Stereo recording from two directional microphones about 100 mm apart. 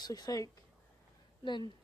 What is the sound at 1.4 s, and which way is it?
Speech, 50° left (ahead or behind).